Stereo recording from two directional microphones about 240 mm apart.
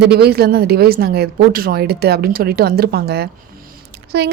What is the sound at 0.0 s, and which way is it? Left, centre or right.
A woman's voice, right.